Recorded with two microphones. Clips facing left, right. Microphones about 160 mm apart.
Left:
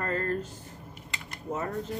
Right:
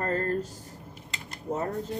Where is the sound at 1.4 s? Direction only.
35° right (ahead or behind).